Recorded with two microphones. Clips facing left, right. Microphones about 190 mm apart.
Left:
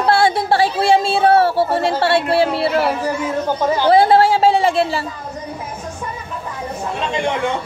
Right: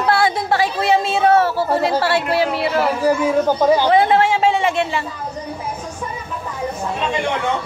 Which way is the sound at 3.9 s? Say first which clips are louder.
Left 3 dB; 35° left (ahead or behind).